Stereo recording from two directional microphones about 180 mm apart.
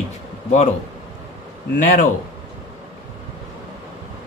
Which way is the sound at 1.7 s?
40° left (ahead or behind).